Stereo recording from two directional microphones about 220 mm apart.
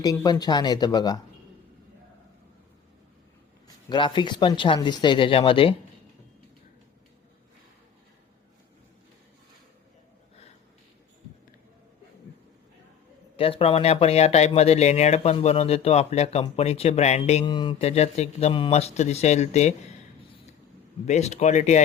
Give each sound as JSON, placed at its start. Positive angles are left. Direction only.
{"t": 0.0, "sound": "speech", "side_deg": 15}
{"t": 3.8, "sound": "speech", "side_deg": 20}
{"t": 13.3, "sound": "speech", "side_deg": 25}
{"t": 21.1, "sound": "speech", "side_deg": 30}